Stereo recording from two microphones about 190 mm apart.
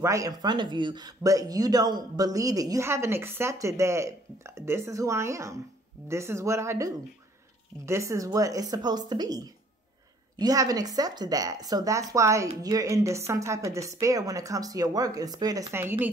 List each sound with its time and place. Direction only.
0.0 s speech: 15° right (ahead or behind)